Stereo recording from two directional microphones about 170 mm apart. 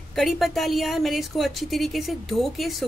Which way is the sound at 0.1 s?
Centre (ahead or behind).